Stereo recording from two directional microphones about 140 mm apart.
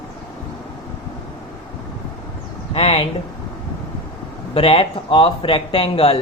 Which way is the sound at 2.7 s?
45° left (ahead or behind).